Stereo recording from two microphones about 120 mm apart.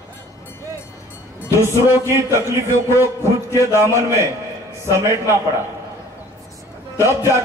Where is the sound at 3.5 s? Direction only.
20° right (ahead or behind).